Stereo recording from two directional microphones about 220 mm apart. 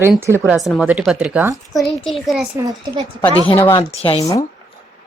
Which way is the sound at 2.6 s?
15° right (ahead or behind).